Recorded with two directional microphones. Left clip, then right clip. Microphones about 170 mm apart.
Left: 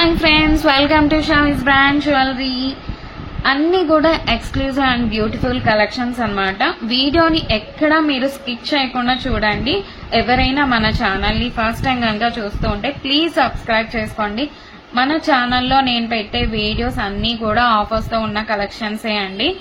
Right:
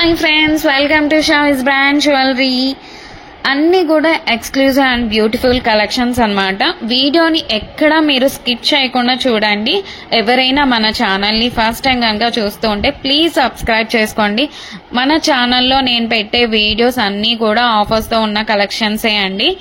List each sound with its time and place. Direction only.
0.0 s a woman's voice: 20° right (ahead or behind)
1.3 s a woman's voice: 35° right (ahead or behind); by 4.2 s 15° right (ahead or behind)
4.3 s a woman's voice: 35° right (ahead or behind)
13.0 s a woman's voice: 20° right (ahead or behind)